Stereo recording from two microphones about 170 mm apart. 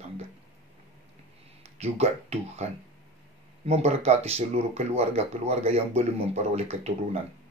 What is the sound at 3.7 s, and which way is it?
Speech, 40° right (ahead or behind).